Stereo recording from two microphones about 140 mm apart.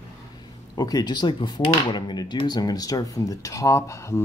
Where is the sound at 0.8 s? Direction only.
30° left (ahead or behind).